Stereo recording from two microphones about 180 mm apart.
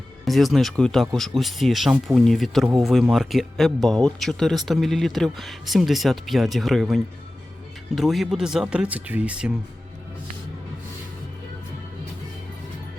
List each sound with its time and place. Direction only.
0.3 s speech: centre (ahead or behind)